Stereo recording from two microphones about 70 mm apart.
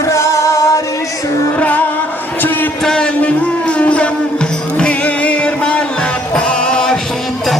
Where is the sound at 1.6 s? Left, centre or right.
Left.